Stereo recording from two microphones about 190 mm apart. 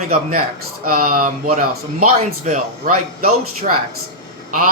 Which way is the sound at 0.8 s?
45° right (ahead or behind).